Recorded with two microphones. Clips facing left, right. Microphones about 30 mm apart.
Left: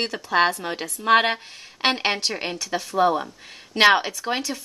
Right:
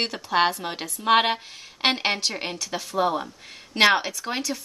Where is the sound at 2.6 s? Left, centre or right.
Centre.